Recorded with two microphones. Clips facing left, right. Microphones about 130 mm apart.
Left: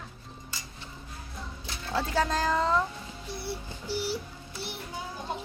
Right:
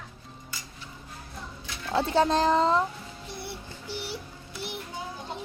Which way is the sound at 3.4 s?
20° right (ahead or behind).